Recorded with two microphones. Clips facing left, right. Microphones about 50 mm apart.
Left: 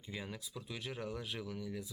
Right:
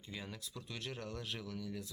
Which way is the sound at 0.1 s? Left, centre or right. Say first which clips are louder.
Left 2 dB; centre.